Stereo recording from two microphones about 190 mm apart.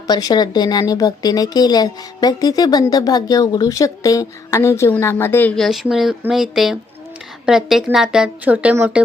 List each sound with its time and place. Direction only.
0.1 s a woman's voice: 20° left (ahead or behind); by 9.0 s 10° right (ahead or behind)